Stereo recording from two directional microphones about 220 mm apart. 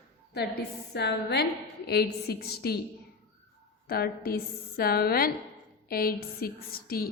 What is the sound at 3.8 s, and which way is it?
A woman's voice, 45° left (ahead or behind).